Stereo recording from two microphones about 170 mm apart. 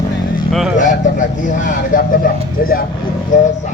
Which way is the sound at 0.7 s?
50° left (ahead or behind).